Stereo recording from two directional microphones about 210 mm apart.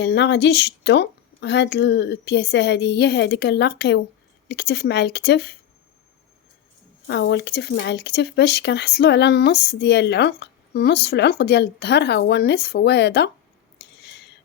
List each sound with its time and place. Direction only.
0.0 s speech: 55° left (ahead or behind)
7.1 s speech: 50° left (ahead or behind)
13.7 s a sound: 55° left (ahead or behind)